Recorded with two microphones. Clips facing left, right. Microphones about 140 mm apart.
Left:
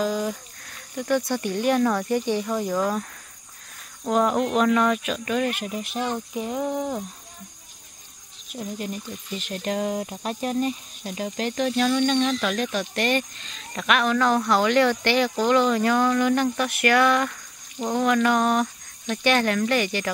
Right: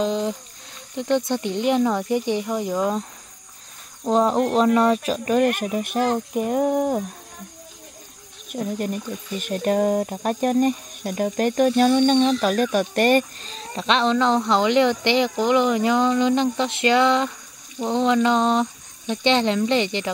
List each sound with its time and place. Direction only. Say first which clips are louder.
0.0 s a sound: right 2 dB; 25° right (ahead or behind)
0.9 s speech: right 2 dB; 20° right (ahead or behind)
4.1 s speech: right 3 dB; 30° right (ahead or behind)
5.4 s speech: right 6 dB; 55° right (ahead or behind)
8.5 s speech: right 6 dB; 50° right (ahead or behind); by 20.1 s 20° right (ahead or behind)